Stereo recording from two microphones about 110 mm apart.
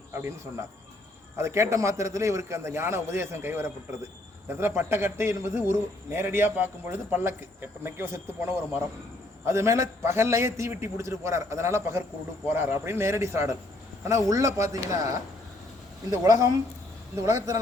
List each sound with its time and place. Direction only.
0.1 s speech: 20° right (ahead or behind)
1.4 s a man's voice: 25° right (ahead or behind)